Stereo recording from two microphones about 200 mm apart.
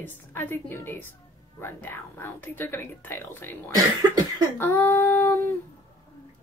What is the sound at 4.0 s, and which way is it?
Cough, 20° right (ahead or behind).